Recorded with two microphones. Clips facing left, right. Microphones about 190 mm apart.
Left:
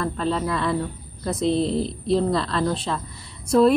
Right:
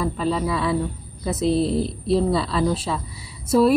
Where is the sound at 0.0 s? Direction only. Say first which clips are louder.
Right 1 dB; 5° right (ahead or behind).